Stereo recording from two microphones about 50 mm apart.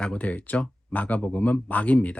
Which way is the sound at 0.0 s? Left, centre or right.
Left.